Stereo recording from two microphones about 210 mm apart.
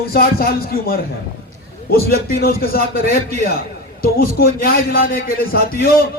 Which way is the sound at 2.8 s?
35° right (ahead or behind).